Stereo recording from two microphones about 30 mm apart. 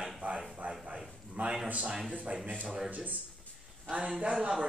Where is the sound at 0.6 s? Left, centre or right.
Right.